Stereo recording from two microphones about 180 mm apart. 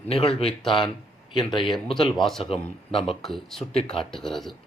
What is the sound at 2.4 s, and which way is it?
Speech, 30° left (ahead or behind).